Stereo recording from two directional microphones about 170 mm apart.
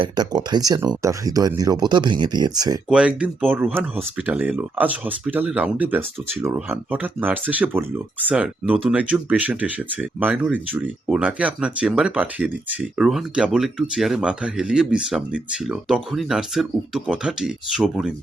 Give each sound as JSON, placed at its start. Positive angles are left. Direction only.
{"t": 0.0, "sound": "speech", "side_deg": -25}
{"t": 2.9, "sound": "speech", "side_deg": -5}